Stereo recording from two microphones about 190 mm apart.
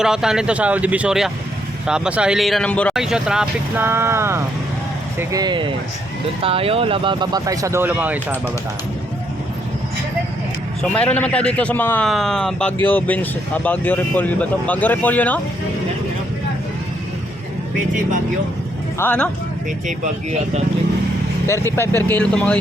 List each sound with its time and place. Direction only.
0.0 s speech: 5° right (ahead or behind)
10.9 s speech: 5° left (ahead or behind)
17.7 s speech: 45° right (ahead or behind)
18.9 s speech: 10° left (ahead or behind)
21.4 s speech: 15° left (ahead or behind)